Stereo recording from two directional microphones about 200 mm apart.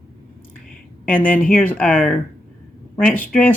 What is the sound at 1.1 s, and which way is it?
Speech, 10° left (ahead or behind).